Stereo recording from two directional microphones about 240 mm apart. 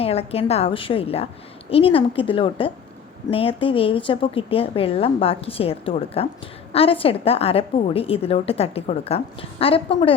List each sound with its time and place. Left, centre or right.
0.0 s a woman's voice: left